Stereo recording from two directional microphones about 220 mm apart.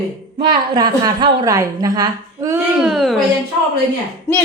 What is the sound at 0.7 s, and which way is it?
A woman's voice, 20° right (ahead or behind).